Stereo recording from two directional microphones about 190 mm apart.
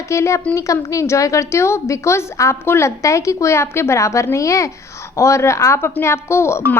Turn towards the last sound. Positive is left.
turn(degrees=15)  # may be behind; listen again after turning